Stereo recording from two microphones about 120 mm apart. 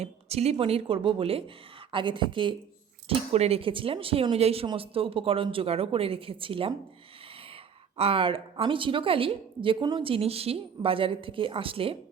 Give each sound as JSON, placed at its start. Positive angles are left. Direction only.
{"t": 0.0, "sound": "a woman's voice", "side_deg": -60}
{"t": 3.1, "sound": "a woman's voice", "side_deg": -60}